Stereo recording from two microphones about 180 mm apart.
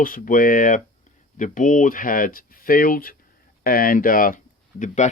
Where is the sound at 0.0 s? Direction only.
50° left (ahead or behind).